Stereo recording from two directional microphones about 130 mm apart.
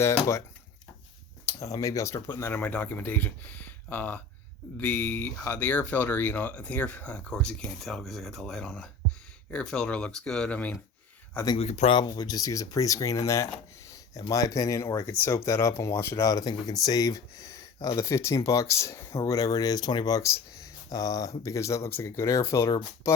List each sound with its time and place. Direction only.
0.0 s speech: 20° left (ahead or behind)
1.6 s speech: 25° left (ahead or behind); by 10.8 s 10° left (ahead or behind)
11.5 s speech: 55° left (ahead or behind)
11.9 s speech: 30° left (ahead or behind)